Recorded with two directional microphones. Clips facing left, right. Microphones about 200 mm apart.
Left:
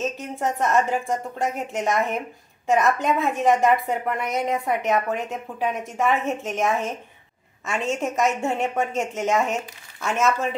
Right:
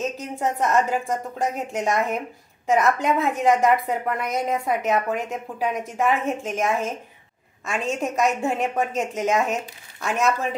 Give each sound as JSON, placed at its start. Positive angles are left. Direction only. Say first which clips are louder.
{"t": 0.2, "sound": "a woman's voice", "louder": "even", "side_deg": 0}